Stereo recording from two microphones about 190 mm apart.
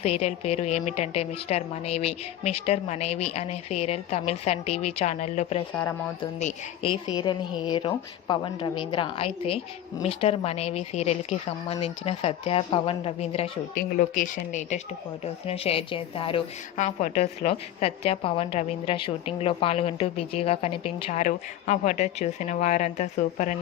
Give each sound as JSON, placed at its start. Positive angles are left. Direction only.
{"t": 0.0, "sound": "a woman's voice", "side_deg": 35}
{"t": 7.1, "sound": "a woman's voice", "side_deg": 20}
{"t": 13.7, "sound": "speech", "side_deg": 45}
{"t": 15.2, "sound": "a woman's voice", "side_deg": 30}